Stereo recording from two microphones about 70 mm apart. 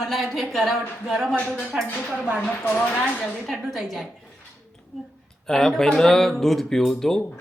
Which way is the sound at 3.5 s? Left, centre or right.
Centre.